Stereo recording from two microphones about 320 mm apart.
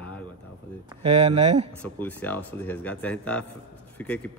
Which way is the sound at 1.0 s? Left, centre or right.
Centre.